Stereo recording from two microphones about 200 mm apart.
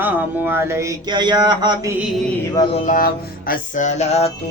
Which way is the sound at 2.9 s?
45° left (ahead or behind).